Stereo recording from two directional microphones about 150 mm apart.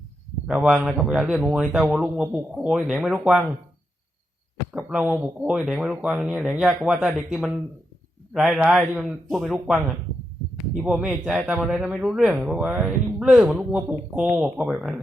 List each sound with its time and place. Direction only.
0.4 s a man's voice: centre (ahead or behind)
4.7 s a man's voice: 5° right (ahead or behind)
10.8 s a man's voice: 5° right (ahead or behind)